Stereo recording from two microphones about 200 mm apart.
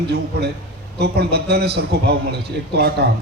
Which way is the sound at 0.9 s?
55° right (ahead or behind).